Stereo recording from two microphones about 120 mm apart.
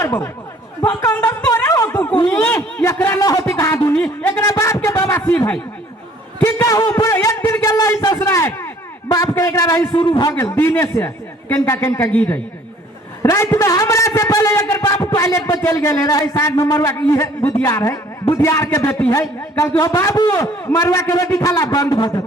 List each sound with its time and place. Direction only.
0.8 s a man's voice: 20° left (ahead or behind)
1.5 s a sound: 25° left (ahead or behind)
2.2 s speech: 15° left (ahead or behind)
3.2 s speech: 30° left (ahead or behind)
3.4 s a sound: 25° left (ahead or behind)
6.4 s a man's voice: 25° left (ahead or behind)
10.0 s a man's voice: 45° left (ahead or behind)
10.2 s a man's voice: 25° left (ahead or behind)
13.2 s a man's voice: 25° left (ahead or behind)